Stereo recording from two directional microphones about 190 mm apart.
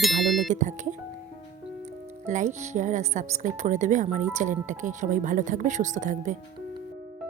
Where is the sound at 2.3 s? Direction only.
40° right (ahead or behind).